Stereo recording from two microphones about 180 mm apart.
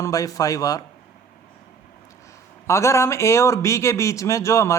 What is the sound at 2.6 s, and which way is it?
A man's voice, 15° left (ahead or behind).